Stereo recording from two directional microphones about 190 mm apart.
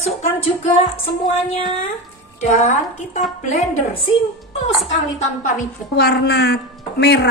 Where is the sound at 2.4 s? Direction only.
40° left (ahead or behind).